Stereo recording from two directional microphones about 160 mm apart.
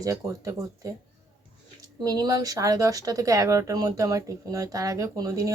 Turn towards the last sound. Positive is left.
turn(degrees=-20)  # may be behind; listen again after turning